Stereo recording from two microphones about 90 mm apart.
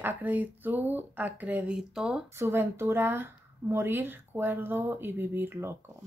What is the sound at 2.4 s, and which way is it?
Speech, 30° right (ahead or behind).